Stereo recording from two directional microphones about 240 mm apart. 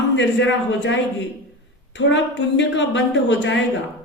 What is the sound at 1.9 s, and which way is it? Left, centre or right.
A woman's voice, left.